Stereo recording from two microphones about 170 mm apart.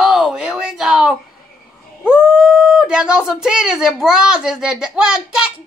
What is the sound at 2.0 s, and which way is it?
Speech, 5° right (ahead or behind).